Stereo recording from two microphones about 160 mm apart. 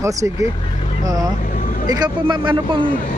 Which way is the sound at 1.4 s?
55° left (ahead or behind).